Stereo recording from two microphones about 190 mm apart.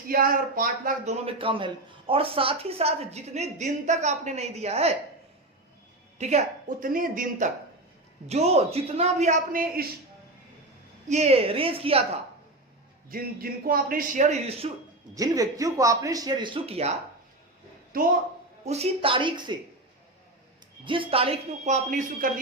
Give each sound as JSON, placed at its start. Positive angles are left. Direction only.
{"t": 0.1, "sound": "a man's voice", "side_deg": -50}
{"t": 6.1, "sound": "a man's voice", "side_deg": -35}
{"t": 11.1, "sound": "speech", "side_deg": -35}
{"t": 13.1, "sound": "a man's voice", "side_deg": -50}
{"t": 15.1, "sound": "speech", "side_deg": -20}
{"t": 17.9, "sound": "a man's voice", "side_deg": -50}
{"t": 18.6, "sound": "speech", "side_deg": -35}
{"t": 20.8, "sound": "a man's voice", "side_deg": -25}